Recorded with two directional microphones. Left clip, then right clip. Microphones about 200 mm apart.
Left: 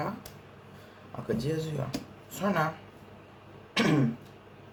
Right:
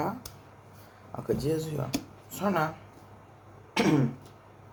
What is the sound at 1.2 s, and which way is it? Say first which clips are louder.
Speech: right 3 dB; 10° right (ahead or behind).